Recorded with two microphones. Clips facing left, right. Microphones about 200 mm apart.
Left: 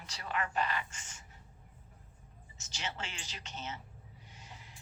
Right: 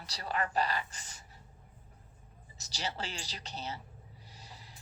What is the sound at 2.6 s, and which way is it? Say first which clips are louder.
A woman's voice: right 3 dB; 35° right (ahead or behind).